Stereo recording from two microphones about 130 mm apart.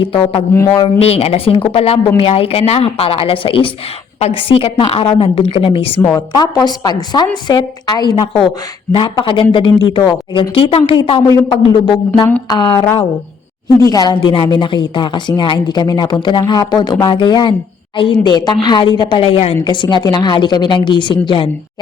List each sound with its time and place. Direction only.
0.0 s a woman's voice: 45° left (ahead or behind)
0.5 s speech: 20° left (ahead or behind)
0.9 s a woman's voice: 50° left (ahead or behind)
6.1 s speech: 30° left (ahead or behind)
13.8 s speech: 30° left (ahead or behind)
14.2 s speech: 40° left (ahead or behind)
19.6 s speech: 35° left (ahead or behind)